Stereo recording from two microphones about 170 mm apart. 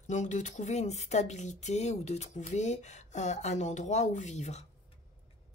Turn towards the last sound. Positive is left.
turn(degrees=40)  # may be behind; listen again after turning